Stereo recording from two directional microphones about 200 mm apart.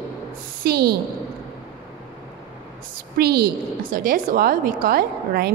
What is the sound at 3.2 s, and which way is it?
A woman's voice, 50° right (ahead or behind).